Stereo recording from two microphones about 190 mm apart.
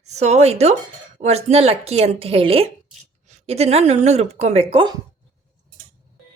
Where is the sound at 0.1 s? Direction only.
35° right (ahead or behind).